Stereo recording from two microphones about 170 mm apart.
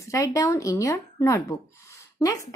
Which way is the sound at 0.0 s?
20° left (ahead or behind).